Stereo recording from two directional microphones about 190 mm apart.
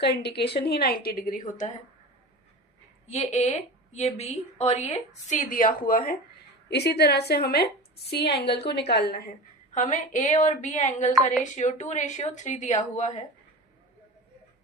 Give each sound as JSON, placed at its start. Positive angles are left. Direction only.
{"t": 0.0, "sound": "a woman's voice", "side_deg": 60}
{"t": 3.1, "sound": "a woman's voice", "side_deg": 35}
{"t": 6.7, "sound": "a woman's voice", "side_deg": 60}
{"t": 9.7, "sound": "a woman's voice", "side_deg": 40}